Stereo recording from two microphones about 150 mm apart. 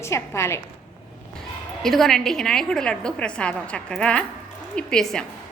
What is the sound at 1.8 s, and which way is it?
A woman's voice, centre (ahead or behind).